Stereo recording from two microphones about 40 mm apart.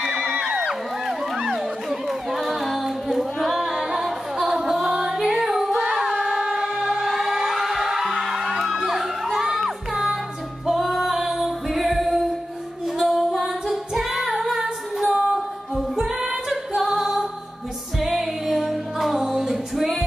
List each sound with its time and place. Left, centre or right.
0.0 s music: centre
0.3 s music: right
0.7 s crowd: centre
3.5 s singing: centre
6.4 s music: centre
10.7 s female singing: centre
15.0 s music: right
15.3 s singing: centre
18.0 s music: centre